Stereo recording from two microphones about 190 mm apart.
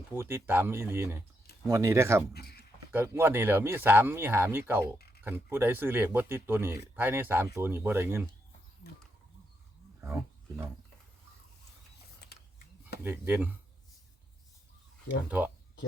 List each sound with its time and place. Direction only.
0.1 s speech: 10° right (ahead or behind)
2.3 s speech: 55° left (ahead or behind)
2.9 s speech: 10° right (ahead or behind)
10.0 s roaring cats: 10° right (ahead or behind)
13.0 s speech: 10° right (ahead or behind)
15.3 s speech: 10° right (ahead or behind)